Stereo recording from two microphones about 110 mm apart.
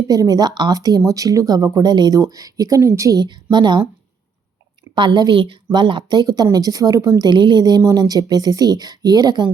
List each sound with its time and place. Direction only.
0.1 s speech: 35° right (ahead or behind)
3.2 s a woman's voice: 45° right (ahead or behind)
4.9 s a woman's voice: 45° right (ahead or behind)